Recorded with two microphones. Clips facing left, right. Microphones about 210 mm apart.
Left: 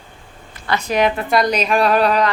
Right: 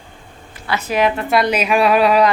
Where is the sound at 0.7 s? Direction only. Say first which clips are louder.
Even; 5° right (ahead or behind).